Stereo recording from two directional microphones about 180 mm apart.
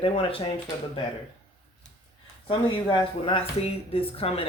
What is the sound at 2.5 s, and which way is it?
Speech, 30° left (ahead or behind).